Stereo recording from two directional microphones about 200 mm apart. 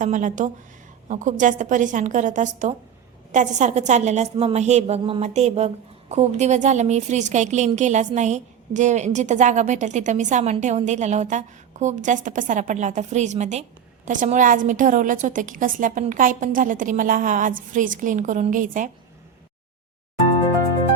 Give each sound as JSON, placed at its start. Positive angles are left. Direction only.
{"t": 0.0, "sound": "a woman's voice", "side_deg": -40}